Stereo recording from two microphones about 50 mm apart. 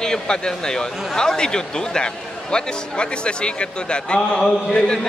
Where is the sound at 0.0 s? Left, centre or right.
Centre.